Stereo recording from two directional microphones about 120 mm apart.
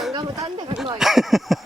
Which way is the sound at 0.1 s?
35° right (ahead or behind).